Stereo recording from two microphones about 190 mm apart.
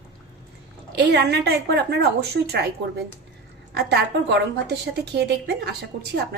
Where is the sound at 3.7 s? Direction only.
60° right (ahead or behind).